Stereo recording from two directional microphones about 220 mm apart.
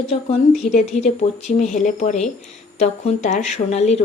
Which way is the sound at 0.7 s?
30° left (ahead or behind).